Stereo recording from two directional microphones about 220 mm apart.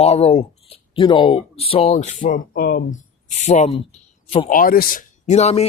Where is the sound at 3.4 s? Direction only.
30° left (ahead or behind).